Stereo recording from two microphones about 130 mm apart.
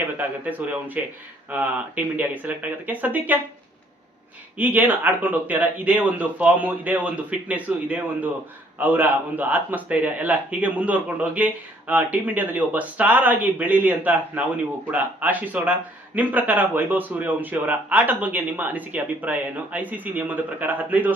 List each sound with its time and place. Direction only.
0.2 s a man's voice: 10° right (ahead or behind)
4.5 s a man's voice: 15° right (ahead or behind)